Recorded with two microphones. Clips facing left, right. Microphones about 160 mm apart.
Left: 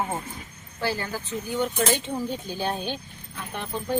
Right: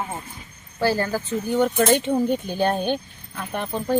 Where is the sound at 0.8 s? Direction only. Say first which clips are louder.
Right 7 dB; 40° right (ahead or behind).